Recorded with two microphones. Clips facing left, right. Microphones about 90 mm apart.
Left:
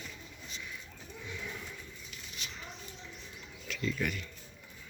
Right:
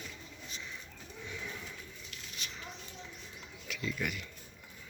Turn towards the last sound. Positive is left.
turn(degrees=-10)  # may be behind; listen again after turning